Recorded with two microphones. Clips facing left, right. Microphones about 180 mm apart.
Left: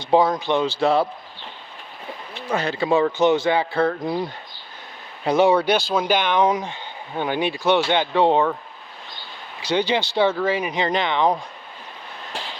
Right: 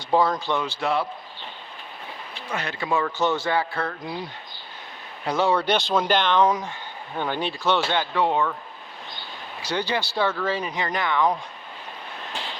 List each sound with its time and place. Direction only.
0.0 s speech: 20° left (ahead or behind)
2.5 s speech: 30° left (ahead or behind)
3.8 s speech: 45° left (ahead or behind)
5.2 s speech: 20° left (ahead or behind)
9.6 s speech: 20° left (ahead or behind)